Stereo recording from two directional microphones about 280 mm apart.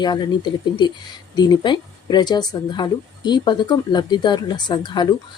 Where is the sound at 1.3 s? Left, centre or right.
Centre.